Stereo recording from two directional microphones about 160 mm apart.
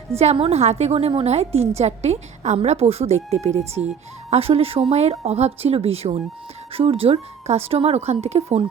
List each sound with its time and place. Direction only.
0.2 s a woman's voice: 40° right (ahead or behind)